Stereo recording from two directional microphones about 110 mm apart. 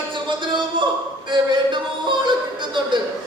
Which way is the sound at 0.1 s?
45° right (ahead or behind).